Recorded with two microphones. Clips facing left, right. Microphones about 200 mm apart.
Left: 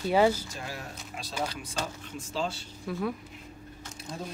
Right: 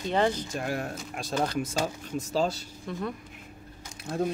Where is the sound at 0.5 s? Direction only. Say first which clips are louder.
Right 8 dB; 55° right (ahead or behind); by 2.6 s 40° right (ahead or behind).